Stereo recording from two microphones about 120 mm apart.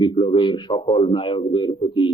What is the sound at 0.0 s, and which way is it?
A man's voice, 45° left (ahead or behind).